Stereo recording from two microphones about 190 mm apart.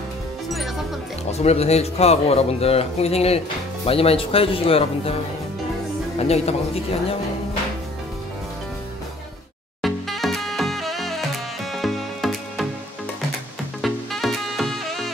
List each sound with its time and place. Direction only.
1.3 s speech: 35° left (ahead or behind)
6.1 s speech: 35° left (ahead or behind)
9.8 s music: centre (ahead or behind)
13.7 s music: centre (ahead or behind)